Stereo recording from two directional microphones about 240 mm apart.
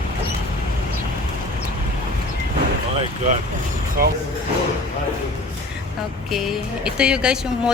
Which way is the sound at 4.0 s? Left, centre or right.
Right.